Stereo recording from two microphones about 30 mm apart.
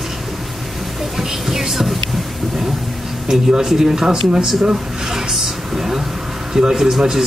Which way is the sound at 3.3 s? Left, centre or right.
Right.